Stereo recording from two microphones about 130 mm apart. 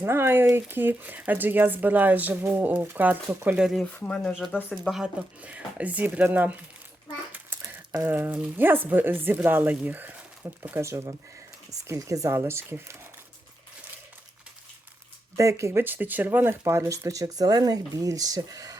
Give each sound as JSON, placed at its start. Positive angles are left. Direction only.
{"t": 0.0, "sound": "speech", "side_deg": -20}
{"t": 3.9, "sound": "speech", "side_deg": 10}
{"t": 4.7, "sound": "speech", "side_deg": 0}
{"t": 7.3, "sound": "a sound", "side_deg": -15}
{"t": 7.9, "sound": "speech", "side_deg": -15}
{"t": 15.4, "sound": "speech", "side_deg": -25}